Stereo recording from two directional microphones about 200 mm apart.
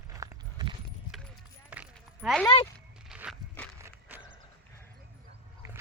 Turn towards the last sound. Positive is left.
turn(degrees=-10)  # may be behind; listen again after turning